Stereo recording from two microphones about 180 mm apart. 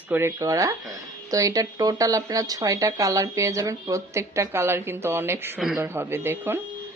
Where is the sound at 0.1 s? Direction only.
15° right (ahead or behind).